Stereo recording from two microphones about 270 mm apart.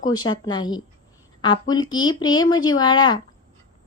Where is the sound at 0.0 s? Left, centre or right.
Centre.